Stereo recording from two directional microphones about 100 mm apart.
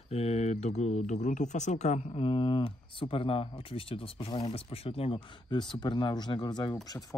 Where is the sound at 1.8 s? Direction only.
70° left (ahead or behind).